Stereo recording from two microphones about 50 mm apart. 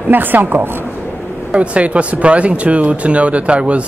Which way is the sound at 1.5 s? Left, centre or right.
Right.